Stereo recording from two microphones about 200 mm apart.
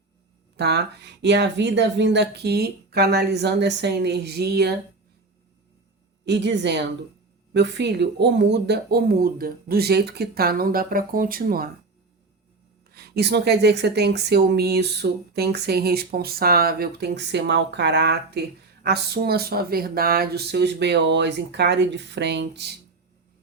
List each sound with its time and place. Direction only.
0.5 s speech: 55° right (ahead or behind)
6.2 s speech: 60° right (ahead or behind)
12.9 s speech: 50° right (ahead or behind)